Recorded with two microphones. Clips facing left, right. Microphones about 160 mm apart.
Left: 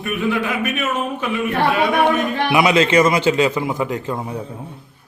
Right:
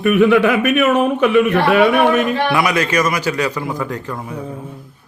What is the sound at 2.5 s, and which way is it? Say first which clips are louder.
A man's voice: left 2 dB; 20° left (ahead or behind).